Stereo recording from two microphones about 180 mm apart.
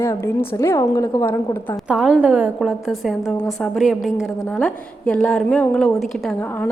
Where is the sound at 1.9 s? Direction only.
5° right (ahead or behind).